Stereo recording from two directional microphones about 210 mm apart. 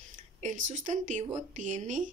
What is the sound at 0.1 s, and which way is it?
Speech, 35° right (ahead or behind).